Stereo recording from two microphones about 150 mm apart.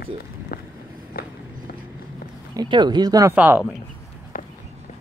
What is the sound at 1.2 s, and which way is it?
Walk, 85° left.